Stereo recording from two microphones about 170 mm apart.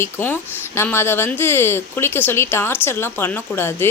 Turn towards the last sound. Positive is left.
turn(degrees=15)  # may be behind; listen again after turning